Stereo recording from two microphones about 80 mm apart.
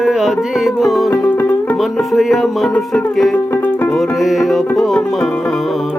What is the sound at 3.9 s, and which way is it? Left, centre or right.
Music, centre.